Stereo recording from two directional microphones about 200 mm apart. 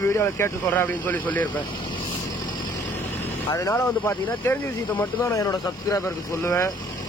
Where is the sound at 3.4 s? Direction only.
15° left (ahead or behind).